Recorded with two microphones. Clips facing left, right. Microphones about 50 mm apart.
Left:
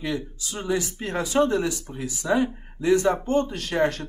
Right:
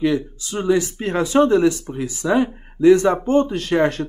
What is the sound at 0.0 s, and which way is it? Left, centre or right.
Speech, right.